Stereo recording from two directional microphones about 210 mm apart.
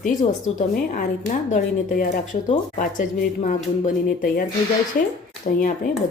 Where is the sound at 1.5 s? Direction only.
40° left (ahead or behind).